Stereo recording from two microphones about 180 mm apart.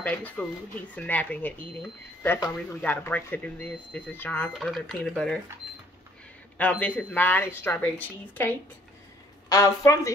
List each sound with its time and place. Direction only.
0.0 s speech: 5° left (ahead or behind)
6.6 s speech: 10° left (ahead or behind)